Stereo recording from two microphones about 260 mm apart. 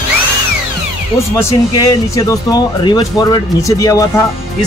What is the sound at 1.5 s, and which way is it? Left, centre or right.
Speech, centre.